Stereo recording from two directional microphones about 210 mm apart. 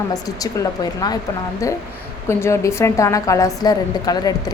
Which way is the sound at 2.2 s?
10° left (ahead or behind).